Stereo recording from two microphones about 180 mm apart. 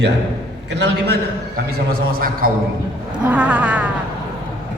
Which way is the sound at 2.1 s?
50° right (ahead or behind).